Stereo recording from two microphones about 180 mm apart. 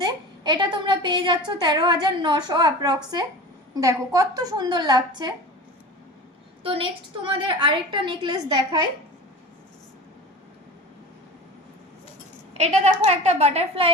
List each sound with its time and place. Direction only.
0.0 s a woman's voice: 25° right (ahead or behind)
6.6 s a woman's voice: 30° right (ahead or behind)
12.5 s a woman's voice: 35° right (ahead or behind)